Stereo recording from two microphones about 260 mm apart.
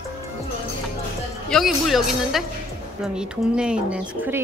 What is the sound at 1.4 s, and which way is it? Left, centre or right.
Speech, centre.